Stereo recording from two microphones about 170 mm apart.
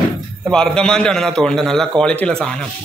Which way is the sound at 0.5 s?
5° left (ahead or behind).